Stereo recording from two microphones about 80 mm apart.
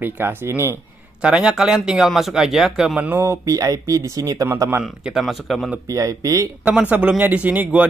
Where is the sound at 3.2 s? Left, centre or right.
Right.